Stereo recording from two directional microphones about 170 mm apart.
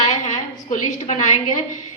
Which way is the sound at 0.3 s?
45° left (ahead or behind).